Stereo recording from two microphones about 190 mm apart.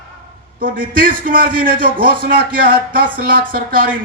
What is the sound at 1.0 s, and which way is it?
A man's voice, 50° right (ahead or behind).